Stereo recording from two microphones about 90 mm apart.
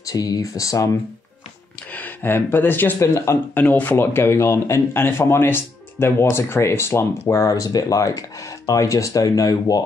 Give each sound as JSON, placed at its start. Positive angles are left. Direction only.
{"t": 0.0, "sound": "speech", "side_deg": 45}
{"t": 1.9, "sound": "a man's voice", "side_deg": 20}